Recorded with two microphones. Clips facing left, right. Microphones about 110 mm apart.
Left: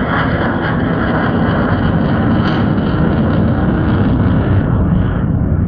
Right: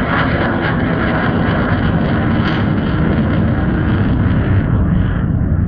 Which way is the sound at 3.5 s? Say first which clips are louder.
Left 2 dB; 30° left (ahead or behind).